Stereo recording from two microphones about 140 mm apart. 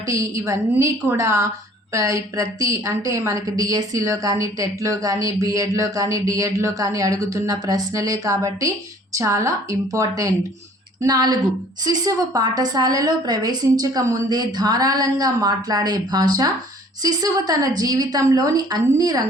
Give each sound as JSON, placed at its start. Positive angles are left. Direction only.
{"t": 0.1, "sound": "a woman's voice", "side_deg": -20}